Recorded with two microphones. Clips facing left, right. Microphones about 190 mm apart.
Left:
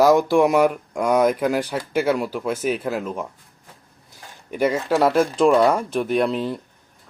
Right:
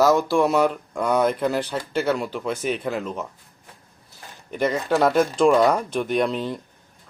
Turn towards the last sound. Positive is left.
turn(degrees=5)  # may be behind; listen again after turning